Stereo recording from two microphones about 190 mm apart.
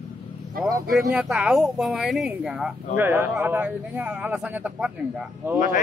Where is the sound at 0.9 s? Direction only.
Centre (ahead or behind).